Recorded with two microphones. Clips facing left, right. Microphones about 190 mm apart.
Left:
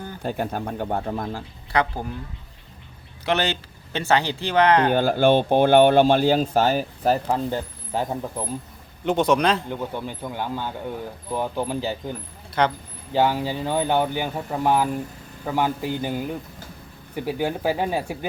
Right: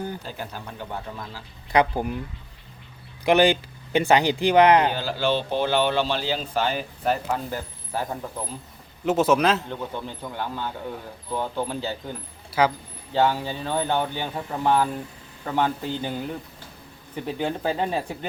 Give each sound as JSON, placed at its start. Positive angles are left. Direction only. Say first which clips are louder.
{"t": 0.2, "sound": "speech", "louder": "left 9 dB", "side_deg": 55}
{"t": 1.7, "sound": "speech", "louder": "right 3 dB", "side_deg": -15}
{"t": 3.2, "sound": "speech", "louder": "right 5 dB", "side_deg": -15}
{"t": 4.9, "sound": "speech", "louder": "left 7 dB", "side_deg": 50}
{"t": 9.0, "sound": "a man's voice", "louder": "even", "side_deg": -5}
{"t": 9.6, "sound": "speech", "louder": "left 3 dB", "side_deg": 15}
{"t": 12.5, "sound": "speech", "louder": "even", "side_deg": -5}
{"t": 13.1, "sound": "speech", "louder": "left 1 dB", "side_deg": 15}